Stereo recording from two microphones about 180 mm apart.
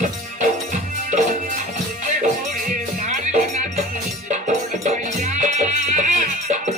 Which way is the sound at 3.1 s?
40° right (ahead or behind).